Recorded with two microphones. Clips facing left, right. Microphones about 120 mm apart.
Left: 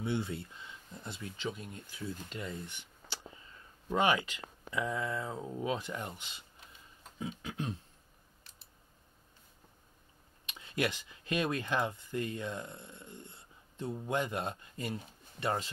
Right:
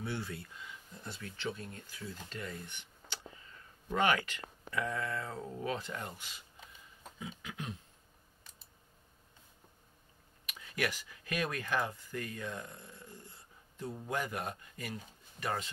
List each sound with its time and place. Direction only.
0.0 s speech: 20° left (ahead or behind)
3.9 s speech: 20° left (ahead or behind)
7.2 s a sound: 35° left (ahead or behind)
10.4 s speech: 25° left (ahead or behind)